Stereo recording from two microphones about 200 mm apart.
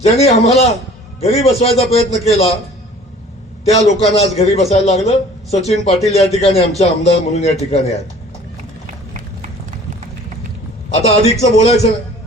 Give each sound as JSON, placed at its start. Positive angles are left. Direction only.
{"t": 0.0, "sound": "a man's voice", "side_deg": 30}
{"t": 3.6, "sound": "a man's voice", "side_deg": 30}
{"t": 11.0, "sound": "a man's voice", "side_deg": 30}